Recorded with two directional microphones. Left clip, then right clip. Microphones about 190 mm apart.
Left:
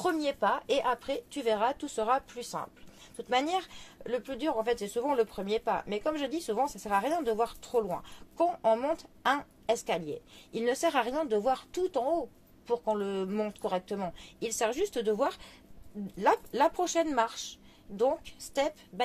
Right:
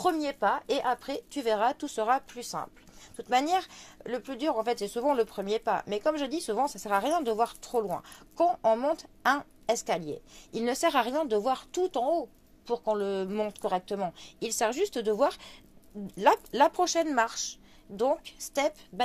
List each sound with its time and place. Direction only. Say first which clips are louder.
0.0 s speech: right 2 dB; 30° right (ahead or behind)